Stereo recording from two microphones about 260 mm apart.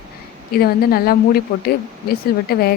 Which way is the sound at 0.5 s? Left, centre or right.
Left.